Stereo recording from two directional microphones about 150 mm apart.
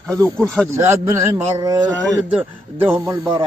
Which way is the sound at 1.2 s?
15° right (ahead or behind).